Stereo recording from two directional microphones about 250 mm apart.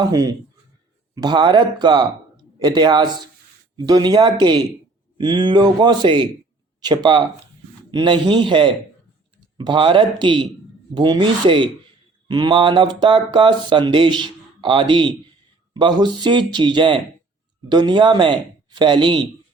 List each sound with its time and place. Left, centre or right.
0.0 s speech: centre